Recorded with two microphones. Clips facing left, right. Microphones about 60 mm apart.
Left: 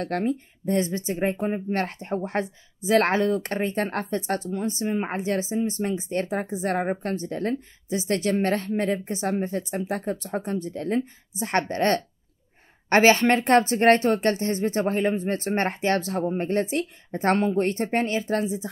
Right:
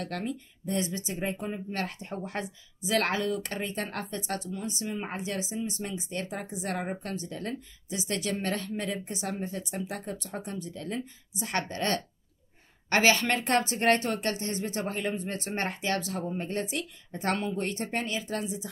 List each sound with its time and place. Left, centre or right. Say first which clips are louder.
0.0 s speech: left 8 dB; left